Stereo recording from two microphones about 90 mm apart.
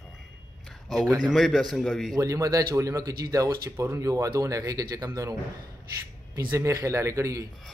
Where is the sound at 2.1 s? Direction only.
35° right (ahead or behind).